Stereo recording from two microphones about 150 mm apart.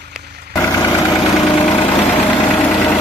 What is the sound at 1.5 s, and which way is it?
Vehicle, 35° left (ahead or behind).